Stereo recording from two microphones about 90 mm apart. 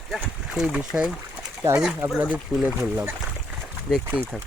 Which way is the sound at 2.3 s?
15° right (ahead or behind).